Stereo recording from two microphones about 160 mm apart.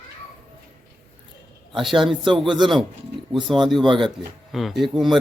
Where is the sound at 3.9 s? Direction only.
30° right (ahead or behind).